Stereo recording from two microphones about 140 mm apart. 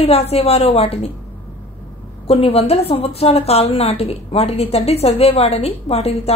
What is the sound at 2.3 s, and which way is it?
A woman's voice, 45° left (ahead or behind).